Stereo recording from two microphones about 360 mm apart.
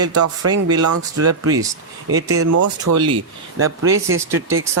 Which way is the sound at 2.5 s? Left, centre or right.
Right.